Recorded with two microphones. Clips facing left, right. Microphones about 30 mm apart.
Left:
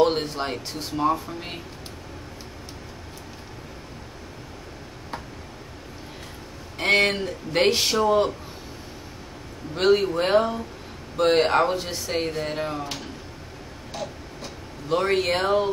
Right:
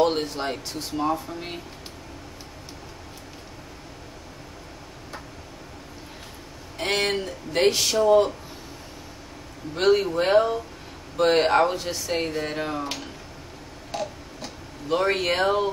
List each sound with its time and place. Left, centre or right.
0.0 s speech: centre
6.9 s speech: centre
7.7 s a man's voice: left
9.8 s speech: centre
12.4 s speech: centre
14.9 s speech: centre